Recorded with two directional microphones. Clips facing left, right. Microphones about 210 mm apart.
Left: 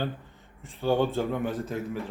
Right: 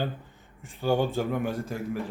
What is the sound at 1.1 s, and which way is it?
Speech, centre (ahead or behind).